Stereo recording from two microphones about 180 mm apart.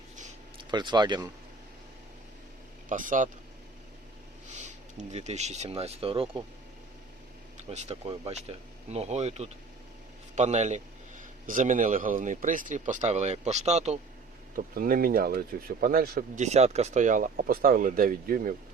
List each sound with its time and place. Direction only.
0.7 s speech: 25° right (ahead or behind)
2.9 s speech: 45° right (ahead or behind)
4.5 s speech: 40° right (ahead or behind)
7.5 s speech: 40° right (ahead or behind)
14.5 s speech: 50° right (ahead or behind)